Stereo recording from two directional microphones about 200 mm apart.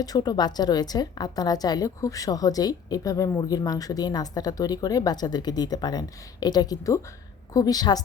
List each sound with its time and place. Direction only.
0.0 s a woman's voice: 20° left (ahead or behind)